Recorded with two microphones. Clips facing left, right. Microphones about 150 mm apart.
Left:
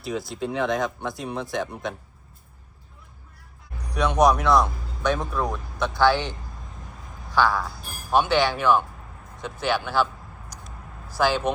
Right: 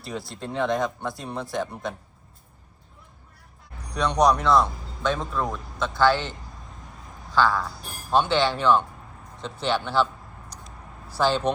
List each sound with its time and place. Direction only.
0.0 s speech: centre (ahead or behind)
3.9 s speech: 5° left (ahead or behind)
5.3 s speech: centre (ahead or behind)
5.8 s speech: 15° left (ahead or behind)
7.3 s speech: 5° left (ahead or behind)
11.2 s speech: 5° left (ahead or behind)